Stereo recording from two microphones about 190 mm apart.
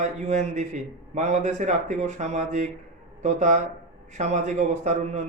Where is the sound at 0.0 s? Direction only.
35° right (ahead or behind).